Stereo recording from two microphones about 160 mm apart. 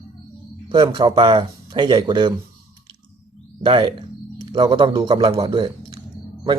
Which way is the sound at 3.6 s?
30° right (ahead or behind).